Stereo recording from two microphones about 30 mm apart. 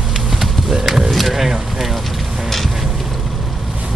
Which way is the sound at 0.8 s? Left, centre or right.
Centre.